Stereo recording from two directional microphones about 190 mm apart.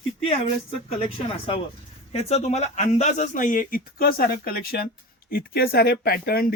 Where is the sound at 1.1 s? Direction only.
30° left (ahead or behind); by 6.4 s 55° left (ahead or behind).